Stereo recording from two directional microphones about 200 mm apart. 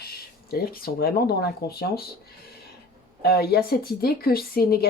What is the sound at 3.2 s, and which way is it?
Speech, 50° left (ahead or behind).